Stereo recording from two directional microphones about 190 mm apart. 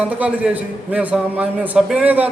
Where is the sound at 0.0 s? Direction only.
5° right (ahead or behind).